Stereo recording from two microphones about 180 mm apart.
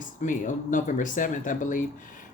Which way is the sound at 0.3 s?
45° left (ahead or behind).